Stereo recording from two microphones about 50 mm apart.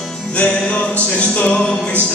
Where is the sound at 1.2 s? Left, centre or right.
Left.